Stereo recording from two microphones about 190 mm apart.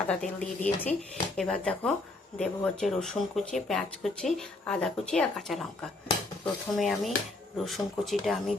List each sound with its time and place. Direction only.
0.1 s speech: 5° left (ahead or behind)